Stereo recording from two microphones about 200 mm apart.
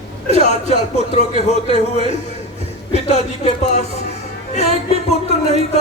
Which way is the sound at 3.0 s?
35° left (ahead or behind).